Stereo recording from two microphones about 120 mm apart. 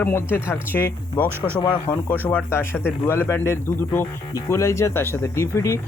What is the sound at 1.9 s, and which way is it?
Speech, 45° left (ahead or behind).